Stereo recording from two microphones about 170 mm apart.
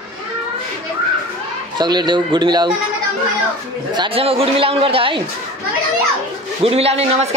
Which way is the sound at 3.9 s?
30° right (ahead or behind).